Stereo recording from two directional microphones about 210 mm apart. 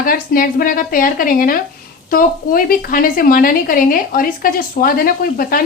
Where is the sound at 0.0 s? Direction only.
40° left (ahead or behind).